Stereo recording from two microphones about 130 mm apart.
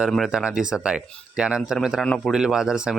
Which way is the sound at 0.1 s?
5° right (ahead or behind).